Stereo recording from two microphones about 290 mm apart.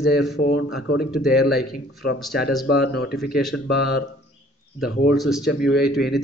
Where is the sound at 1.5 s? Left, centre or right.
Left.